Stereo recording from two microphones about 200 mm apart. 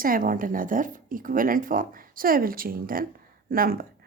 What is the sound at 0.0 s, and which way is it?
Speech, 45° right (ahead or behind).